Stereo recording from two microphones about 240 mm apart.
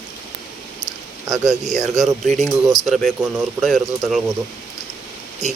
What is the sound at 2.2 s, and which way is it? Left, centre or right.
Speech, centre.